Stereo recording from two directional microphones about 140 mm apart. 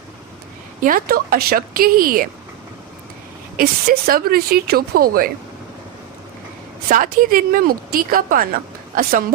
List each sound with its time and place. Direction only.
0.8 s speech: 80° right
3.6 s speech: 90° right
6.8 s speech: 85° right